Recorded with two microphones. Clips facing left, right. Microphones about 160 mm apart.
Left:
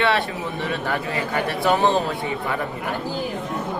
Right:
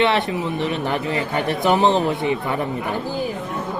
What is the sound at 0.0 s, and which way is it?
Speech, 20° right (ahead or behind).